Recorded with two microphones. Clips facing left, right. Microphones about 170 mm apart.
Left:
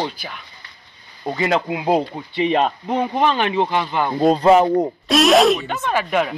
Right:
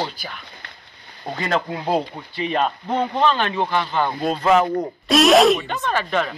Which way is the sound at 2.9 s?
15° left (ahead or behind).